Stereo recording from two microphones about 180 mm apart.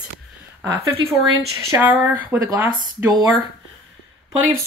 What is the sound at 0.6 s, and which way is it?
Speech, 15° right (ahead or behind).